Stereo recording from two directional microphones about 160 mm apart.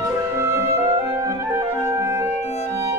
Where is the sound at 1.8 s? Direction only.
20° right (ahead or behind).